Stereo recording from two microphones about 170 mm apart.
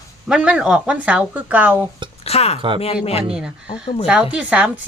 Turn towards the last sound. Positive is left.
turn(degrees=-5)  # may be behind; listen again after turning